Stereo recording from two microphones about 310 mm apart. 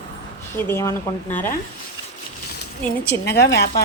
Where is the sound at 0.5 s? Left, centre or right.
Centre.